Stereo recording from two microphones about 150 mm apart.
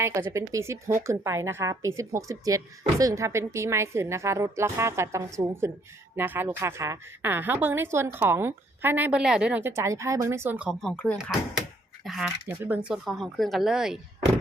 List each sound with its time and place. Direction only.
0.0 s a woman's voice: 20° right (ahead or behind)
10.8 s speech: 10° left (ahead or behind)
11.2 s speech: 5° right (ahead or behind)
12.5 s speech: 10° right (ahead or behind)